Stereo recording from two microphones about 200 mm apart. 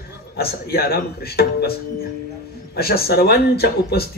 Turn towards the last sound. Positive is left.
turn(degrees=50)  # may be behind; listen again after turning